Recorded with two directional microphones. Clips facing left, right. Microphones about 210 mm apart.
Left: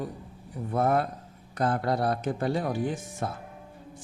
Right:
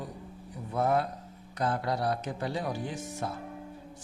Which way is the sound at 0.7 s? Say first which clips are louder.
Left 2 dB; 55° left (ahead or behind).